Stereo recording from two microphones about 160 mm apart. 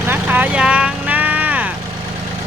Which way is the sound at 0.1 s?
10° right (ahead or behind).